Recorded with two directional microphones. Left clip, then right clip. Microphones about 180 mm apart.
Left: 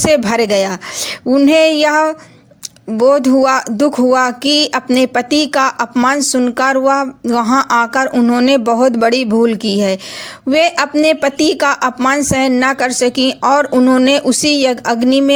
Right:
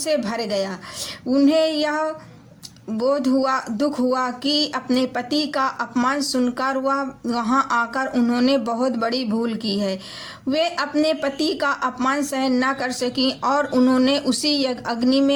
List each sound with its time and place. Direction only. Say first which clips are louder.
0.0 s speech: left 11 dB; 45° left (ahead or behind)
8.1 s speech: left 8 dB; 30° left (ahead or behind)